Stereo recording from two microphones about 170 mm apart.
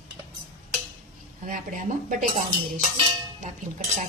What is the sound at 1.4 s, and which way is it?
Speech, 50° right (ahead or behind).